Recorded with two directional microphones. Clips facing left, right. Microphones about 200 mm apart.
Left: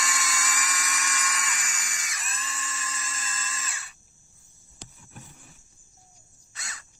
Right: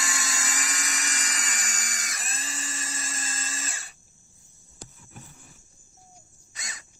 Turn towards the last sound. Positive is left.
turn(degrees=-15)  # may be behind; listen again after turning